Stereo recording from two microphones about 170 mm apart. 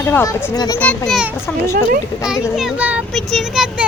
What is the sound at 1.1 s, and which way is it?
A child's voice, 5° right (ahead or behind).